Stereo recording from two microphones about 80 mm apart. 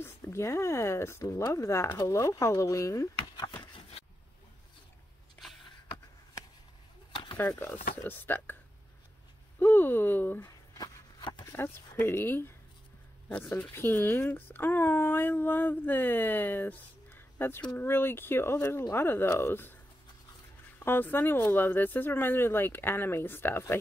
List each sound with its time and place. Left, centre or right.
0.0 s speech: left
7.3 s speech: left
9.6 s speech: left
10.8 s a sound: left
11.5 s speech: left
13.7 s speech: left
20.8 s speech: left